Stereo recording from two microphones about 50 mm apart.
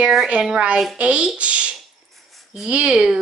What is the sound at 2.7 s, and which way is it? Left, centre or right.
Speech, right.